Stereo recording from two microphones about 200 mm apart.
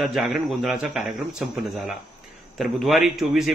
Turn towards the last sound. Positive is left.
turn(degrees=0)  # may be behind; listen again after turning